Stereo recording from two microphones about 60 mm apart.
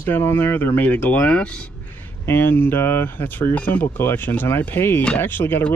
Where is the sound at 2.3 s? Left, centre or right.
Left.